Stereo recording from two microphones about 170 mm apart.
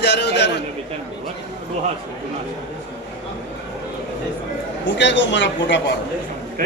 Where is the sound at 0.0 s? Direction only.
90° left.